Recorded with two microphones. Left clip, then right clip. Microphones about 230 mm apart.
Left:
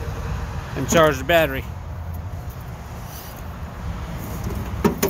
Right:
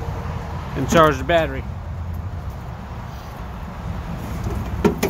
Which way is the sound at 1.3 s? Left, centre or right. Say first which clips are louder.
Left 1 dB; centre.